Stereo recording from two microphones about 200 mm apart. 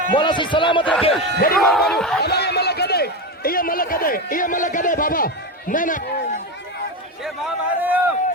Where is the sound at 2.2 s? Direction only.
55° left (ahead or behind).